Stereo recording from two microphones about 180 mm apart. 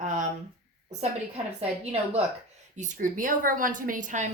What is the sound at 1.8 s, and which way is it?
A woman's voice, 35° right (ahead or behind).